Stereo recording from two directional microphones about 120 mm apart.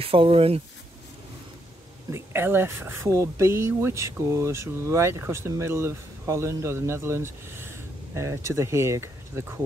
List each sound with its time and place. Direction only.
0.0 s speech: 50° right (ahead or behind)
2.0 s speech: 20° right (ahead or behind)